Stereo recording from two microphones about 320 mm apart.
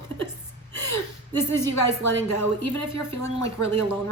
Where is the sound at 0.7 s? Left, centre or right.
Left.